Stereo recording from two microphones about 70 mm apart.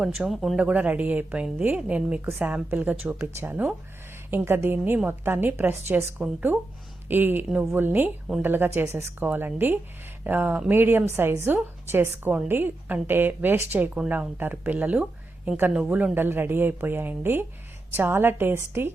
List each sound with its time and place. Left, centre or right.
0.0 s speech: centre
0.5 s a woman's voice: right
16.1 s a woman's voice: right